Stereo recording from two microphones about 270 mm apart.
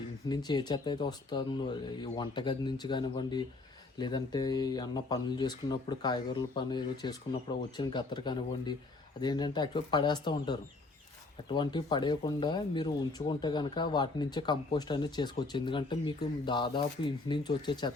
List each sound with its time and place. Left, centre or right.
0.3 s speech: centre